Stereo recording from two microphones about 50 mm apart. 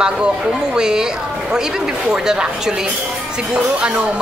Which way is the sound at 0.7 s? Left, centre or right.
Centre.